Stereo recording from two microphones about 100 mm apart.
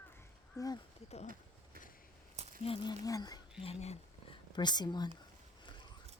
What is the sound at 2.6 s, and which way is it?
Speech, 65° left (ahead or behind).